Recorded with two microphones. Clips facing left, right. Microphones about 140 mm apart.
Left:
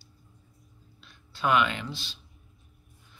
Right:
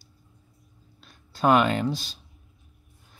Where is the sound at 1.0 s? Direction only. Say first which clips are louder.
Right 6 dB; 40° right (ahead or behind).